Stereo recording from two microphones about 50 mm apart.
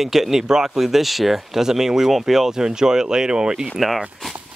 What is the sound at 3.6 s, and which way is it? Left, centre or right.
Speech, centre.